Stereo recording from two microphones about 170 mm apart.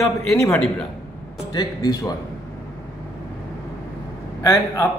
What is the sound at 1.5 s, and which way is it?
Speech, 25° left (ahead or behind).